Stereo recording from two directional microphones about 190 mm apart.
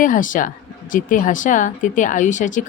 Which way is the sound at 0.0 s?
45° left (ahead or behind).